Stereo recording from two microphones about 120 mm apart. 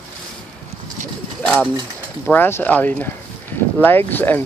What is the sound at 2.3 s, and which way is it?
Speech, 15° left (ahead or behind).